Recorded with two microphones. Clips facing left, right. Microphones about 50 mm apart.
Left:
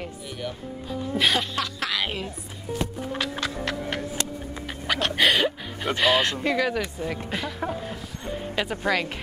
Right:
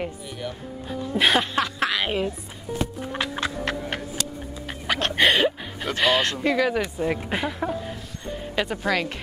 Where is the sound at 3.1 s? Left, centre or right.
Centre.